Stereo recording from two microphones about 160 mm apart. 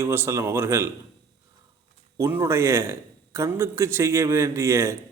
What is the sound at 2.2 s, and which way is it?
A man's voice, 15° right (ahead or behind).